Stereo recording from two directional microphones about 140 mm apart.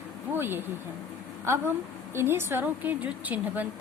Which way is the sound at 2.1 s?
15° right (ahead or behind).